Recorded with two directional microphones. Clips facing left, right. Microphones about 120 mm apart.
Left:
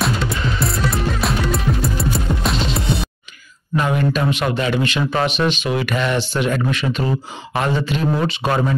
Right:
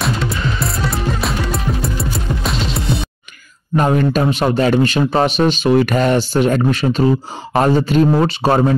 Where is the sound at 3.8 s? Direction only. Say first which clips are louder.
Right 4 dB; 40° right (ahead or behind).